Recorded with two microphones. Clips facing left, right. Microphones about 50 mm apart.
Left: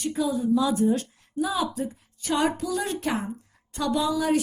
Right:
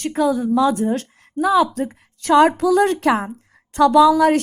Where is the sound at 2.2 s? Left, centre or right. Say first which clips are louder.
Right 11 dB; right.